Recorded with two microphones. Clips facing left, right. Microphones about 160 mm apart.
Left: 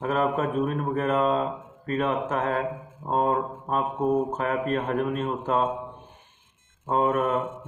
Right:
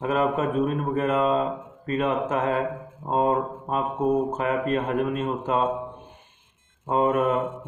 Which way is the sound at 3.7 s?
5° left (ahead or behind).